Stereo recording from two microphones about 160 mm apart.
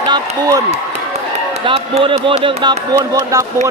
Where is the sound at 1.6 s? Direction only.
35° right (ahead or behind).